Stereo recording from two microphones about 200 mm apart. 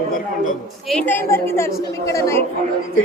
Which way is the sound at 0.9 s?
10° left (ahead or behind).